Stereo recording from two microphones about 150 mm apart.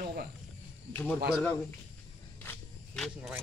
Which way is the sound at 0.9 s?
10° left (ahead or behind).